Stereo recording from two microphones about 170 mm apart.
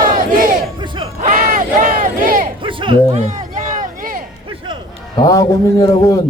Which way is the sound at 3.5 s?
50° right (ahead or behind).